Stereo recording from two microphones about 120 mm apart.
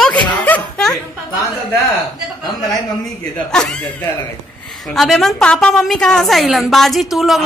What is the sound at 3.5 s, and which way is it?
A woman's voice, 5° left (ahead or behind).